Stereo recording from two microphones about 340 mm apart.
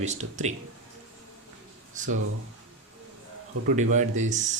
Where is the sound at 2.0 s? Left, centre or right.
Right.